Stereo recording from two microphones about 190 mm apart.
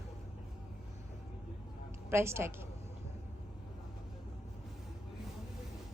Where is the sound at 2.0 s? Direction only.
15° right (ahead or behind).